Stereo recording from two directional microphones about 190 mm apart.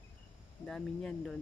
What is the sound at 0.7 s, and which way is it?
Speech, 5° left (ahead or behind).